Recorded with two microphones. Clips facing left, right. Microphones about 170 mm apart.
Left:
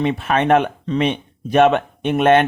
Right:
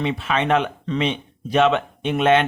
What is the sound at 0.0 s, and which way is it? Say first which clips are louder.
Speech: left 4 dB; 50° left (ahead or behind).